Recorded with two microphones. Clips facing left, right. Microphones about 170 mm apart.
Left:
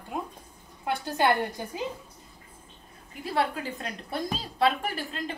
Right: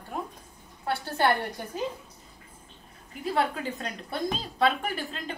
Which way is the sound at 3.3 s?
Centre (ahead or behind).